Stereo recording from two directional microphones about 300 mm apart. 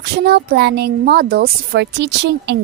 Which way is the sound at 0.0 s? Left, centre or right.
Right.